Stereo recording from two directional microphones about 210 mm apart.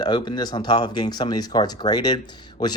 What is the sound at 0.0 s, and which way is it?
Speech, 20° left (ahead or behind).